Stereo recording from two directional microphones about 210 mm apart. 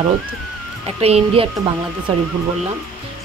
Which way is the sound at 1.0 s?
25° right (ahead or behind).